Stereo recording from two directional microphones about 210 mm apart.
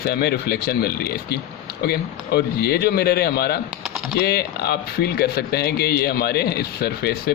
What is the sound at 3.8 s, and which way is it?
Typing, centre (ahead or behind).